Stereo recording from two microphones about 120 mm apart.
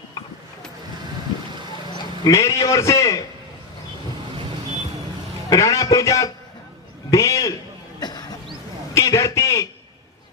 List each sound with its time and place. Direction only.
1.9 s a man's voice: 35° left (ahead or behind)
5.5 s a man's voice: 25° left (ahead or behind)
7.1 s a sound: 25° left (ahead or behind)